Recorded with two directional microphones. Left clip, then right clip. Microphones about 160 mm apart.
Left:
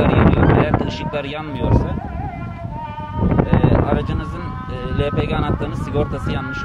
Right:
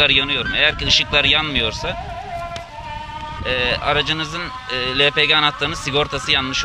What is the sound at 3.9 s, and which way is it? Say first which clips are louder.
Speech: right 4 dB; 5° right (ahead or behind).